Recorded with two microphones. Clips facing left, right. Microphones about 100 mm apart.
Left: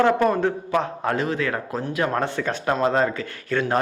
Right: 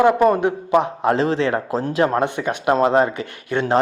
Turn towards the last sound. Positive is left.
turn(degrees=-20)  # may be behind; listen again after turning